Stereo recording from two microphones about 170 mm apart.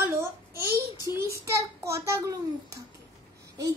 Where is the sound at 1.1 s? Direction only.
15° right (ahead or behind).